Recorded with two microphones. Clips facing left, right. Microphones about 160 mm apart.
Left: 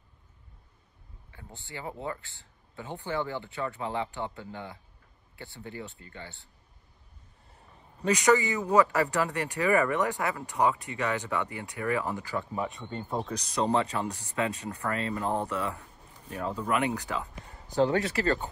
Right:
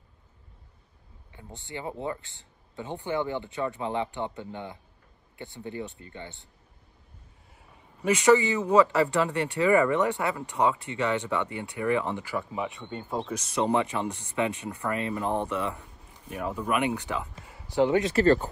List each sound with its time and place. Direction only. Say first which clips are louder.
1.3 s speech: right 4 dB; 20° right (ahead or behind)
8.3 s speech: right 4 dB; 20° right (ahead or behind); by 13.4 s centre (ahead or behind)
13.6 s speech: right 1 dB; 15° right (ahead or behind)
18.1 s speech: right 7 dB; 30° right (ahead or behind)